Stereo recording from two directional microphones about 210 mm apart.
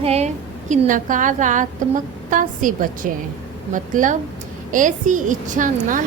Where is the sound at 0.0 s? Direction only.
30° right (ahead or behind).